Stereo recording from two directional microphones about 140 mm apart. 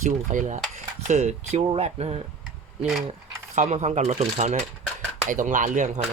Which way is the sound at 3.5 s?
55° right (ahead or behind).